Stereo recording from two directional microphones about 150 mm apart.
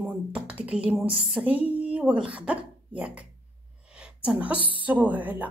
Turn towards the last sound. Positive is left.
turn(degrees=-10)  # may be behind; listen again after turning